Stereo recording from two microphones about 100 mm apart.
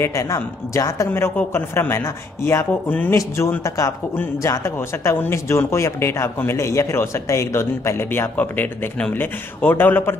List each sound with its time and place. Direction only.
0.0 s speech: 30° left (ahead or behind)